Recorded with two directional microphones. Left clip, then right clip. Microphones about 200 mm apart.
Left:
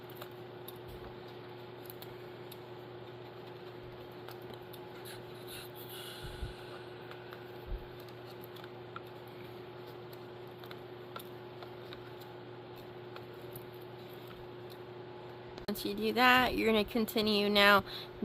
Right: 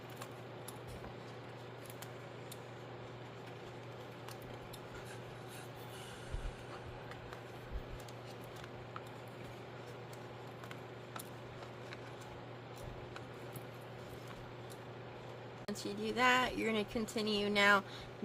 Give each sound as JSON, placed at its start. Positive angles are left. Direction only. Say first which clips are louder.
{"t": 15.8, "sound": "speech", "louder": "left 5 dB", "side_deg": 50}